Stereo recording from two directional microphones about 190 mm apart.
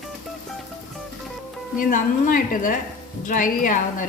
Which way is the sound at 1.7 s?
45° left (ahead or behind).